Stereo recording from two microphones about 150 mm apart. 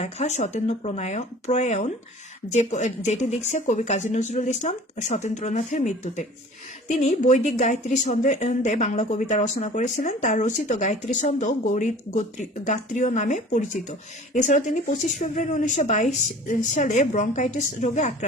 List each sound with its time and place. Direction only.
0.0 s a woman's voice: 45° left (ahead or behind)